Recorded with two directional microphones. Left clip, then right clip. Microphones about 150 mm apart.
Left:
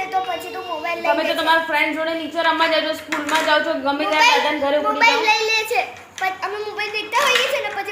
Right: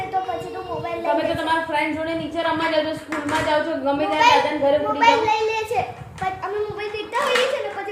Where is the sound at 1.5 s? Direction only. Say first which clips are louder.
Left 4 dB; 30° left (ahead or behind).